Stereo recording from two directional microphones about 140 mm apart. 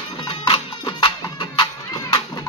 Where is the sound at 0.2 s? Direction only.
40° left (ahead or behind).